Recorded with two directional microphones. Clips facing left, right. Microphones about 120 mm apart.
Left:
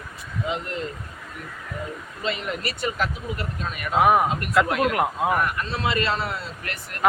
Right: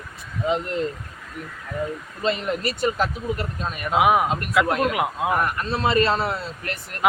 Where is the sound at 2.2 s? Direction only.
35° right (ahead or behind).